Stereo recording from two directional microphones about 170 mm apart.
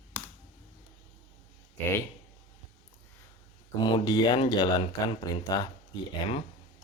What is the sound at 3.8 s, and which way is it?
Speech, 25° left (ahead or behind).